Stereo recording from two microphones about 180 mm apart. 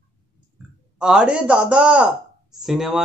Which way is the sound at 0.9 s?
5° right (ahead or behind).